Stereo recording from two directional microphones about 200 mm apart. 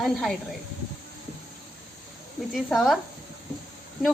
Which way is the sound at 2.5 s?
Centre (ahead or behind).